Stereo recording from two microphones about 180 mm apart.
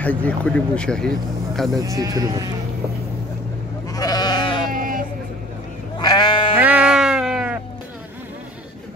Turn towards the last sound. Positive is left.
turn(degrees=-5)  # may be behind; listen again after turning